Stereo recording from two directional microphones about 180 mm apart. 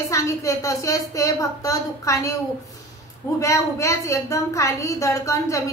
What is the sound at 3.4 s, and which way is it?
A woman's voice, 15° left (ahead or behind).